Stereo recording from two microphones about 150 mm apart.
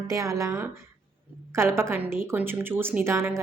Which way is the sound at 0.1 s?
20° right (ahead or behind).